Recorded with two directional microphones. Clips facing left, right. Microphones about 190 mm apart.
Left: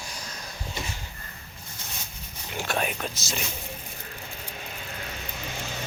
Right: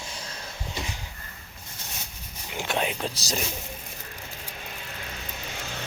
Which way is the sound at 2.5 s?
20° right (ahead or behind).